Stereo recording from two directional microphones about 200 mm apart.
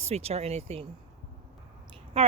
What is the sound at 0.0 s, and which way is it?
Speech, 30° right (ahead or behind).